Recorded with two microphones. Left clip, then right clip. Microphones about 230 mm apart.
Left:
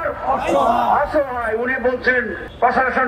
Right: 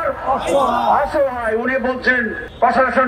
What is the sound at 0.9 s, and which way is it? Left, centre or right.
A man's voice, right.